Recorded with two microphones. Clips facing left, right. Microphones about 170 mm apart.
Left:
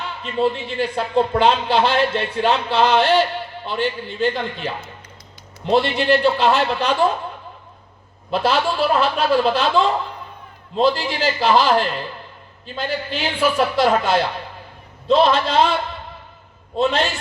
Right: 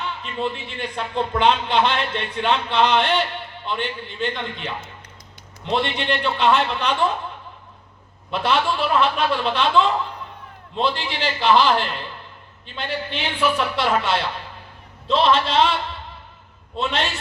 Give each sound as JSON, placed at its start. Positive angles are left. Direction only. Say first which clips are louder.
{"t": 0.0, "sound": "a man's voice", "louder": "left 6 dB", "side_deg": 35}
{"t": 8.3, "sound": "a man's voice", "louder": "left 2 dB", "side_deg": 35}